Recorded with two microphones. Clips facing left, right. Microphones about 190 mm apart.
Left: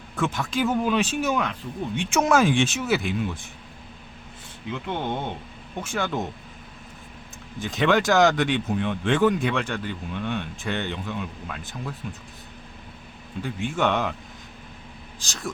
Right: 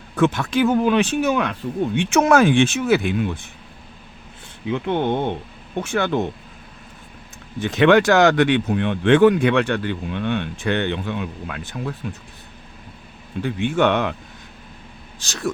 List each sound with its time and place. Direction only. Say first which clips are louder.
0.2 s speech: right 7 dB; 65° right (ahead or behind)
4.7 s speech: right 8 dB; 60° right (ahead or behind)
7.6 s speech: right 7 dB; 65° right (ahead or behind)
13.4 s speech: right 6 dB; 70° right (ahead or behind)
15.2 s speech: right 8 dB; 65° right (ahead or behind)